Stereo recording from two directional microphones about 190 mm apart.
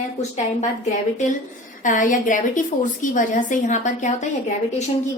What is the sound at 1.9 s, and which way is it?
A woman's voice, 45° left (ahead or behind).